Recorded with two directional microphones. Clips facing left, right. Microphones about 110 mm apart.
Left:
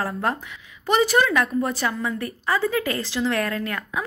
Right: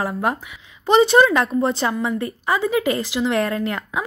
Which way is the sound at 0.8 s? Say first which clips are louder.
Right 5 dB; 25° right (ahead or behind).